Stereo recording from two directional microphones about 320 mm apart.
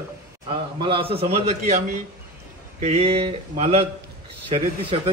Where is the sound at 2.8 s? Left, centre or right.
Centre.